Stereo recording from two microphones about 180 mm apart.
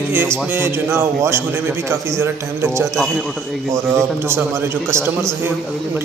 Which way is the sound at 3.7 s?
15° right (ahead or behind).